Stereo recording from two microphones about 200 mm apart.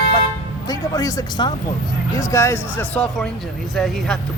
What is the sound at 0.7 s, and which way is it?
Speech, 15° left (ahead or behind).